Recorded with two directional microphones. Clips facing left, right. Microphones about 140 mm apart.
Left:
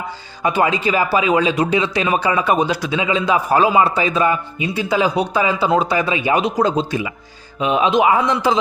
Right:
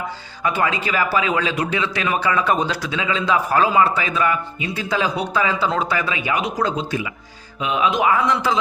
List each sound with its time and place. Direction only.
0.4 s speech: 20° left (ahead or behind)
4.7 s speech: 15° left (ahead or behind)